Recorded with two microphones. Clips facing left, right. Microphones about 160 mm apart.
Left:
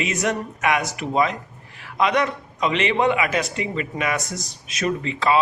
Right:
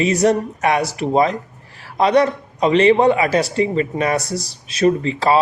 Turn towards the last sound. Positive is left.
turn(degrees=-35)  # may be behind; listen again after turning